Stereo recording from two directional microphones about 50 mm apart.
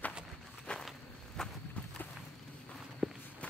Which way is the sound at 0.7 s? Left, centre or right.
Centre.